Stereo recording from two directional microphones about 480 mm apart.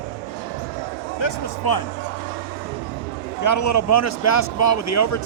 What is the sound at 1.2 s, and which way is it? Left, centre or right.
Speech, left.